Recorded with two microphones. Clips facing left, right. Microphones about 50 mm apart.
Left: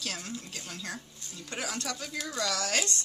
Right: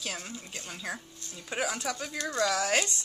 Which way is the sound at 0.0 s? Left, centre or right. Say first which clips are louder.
Even; centre.